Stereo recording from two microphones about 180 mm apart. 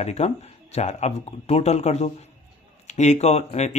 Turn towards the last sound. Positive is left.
turn(degrees=40)  # may be behind; listen again after turning